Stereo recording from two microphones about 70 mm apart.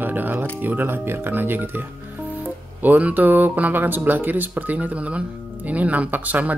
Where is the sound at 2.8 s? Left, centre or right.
Right.